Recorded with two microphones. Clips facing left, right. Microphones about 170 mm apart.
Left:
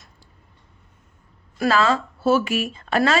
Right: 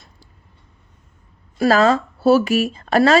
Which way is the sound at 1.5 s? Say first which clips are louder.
Right 5 dB; 40° right (ahead or behind).